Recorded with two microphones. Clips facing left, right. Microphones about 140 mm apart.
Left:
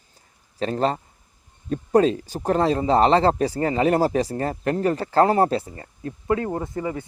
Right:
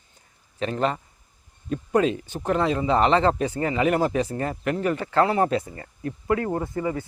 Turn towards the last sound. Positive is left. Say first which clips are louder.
# right 1 dB
turn(degrees=20)  # may be behind; listen again after turning